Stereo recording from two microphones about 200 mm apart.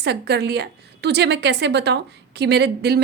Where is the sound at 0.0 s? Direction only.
55° right (ahead or behind).